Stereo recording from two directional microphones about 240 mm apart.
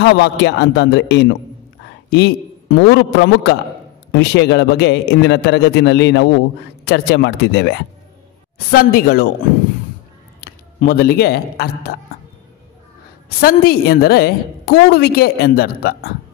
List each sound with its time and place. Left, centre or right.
0.0 s a man's voice: left
10.4 s speech: left
13.4 s a woman's voice: left